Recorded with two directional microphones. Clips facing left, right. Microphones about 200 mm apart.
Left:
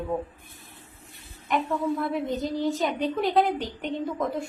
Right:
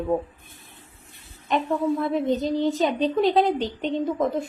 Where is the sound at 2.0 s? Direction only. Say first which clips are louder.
Right 4 dB; 20° right (ahead or behind).